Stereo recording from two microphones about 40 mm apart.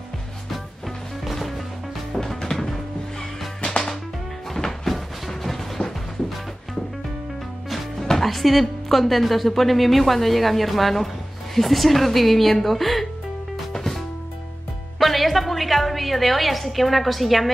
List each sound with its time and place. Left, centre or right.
0.5 s music: centre
2.1 s music: centre
8.1 s a woman's voice: centre
13.7 s music: centre